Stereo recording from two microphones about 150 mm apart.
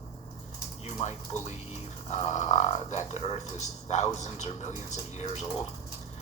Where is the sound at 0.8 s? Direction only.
50° left (ahead or behind).